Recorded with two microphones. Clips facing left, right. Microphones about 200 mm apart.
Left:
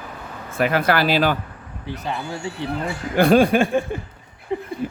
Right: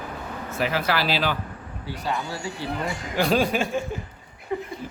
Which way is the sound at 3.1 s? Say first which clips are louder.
Left 7 dB; 55° left (ahead or behind).